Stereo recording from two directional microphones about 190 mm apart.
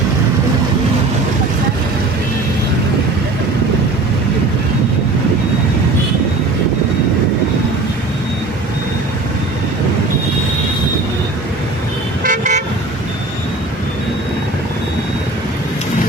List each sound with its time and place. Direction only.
12.2 s car: 40° right (ahead or behind)